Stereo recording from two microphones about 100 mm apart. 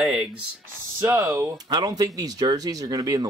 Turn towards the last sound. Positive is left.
turn(degrees=-40)  # may be behind; listen again after turning